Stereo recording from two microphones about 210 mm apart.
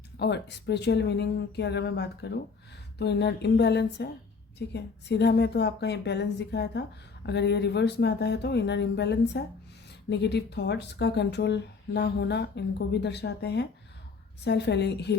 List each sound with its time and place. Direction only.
0.2 s speech: 55° left (ahead or behind)